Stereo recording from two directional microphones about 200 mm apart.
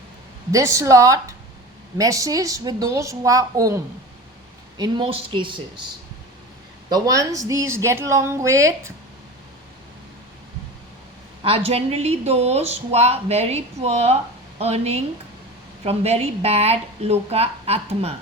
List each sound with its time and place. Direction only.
0.5 s speech: 15° right (ahead or behind)
4.8 s speech: 25° right (ahead or behind)
6.9 s speech: 15° right (ahead or behind)
11.4 s speech: 30° right (ahead or behind)